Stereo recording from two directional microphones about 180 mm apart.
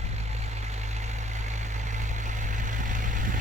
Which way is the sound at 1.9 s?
45° right (ahead or behind).